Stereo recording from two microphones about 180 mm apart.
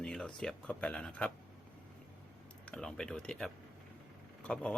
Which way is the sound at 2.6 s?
5° left (ahead or behind).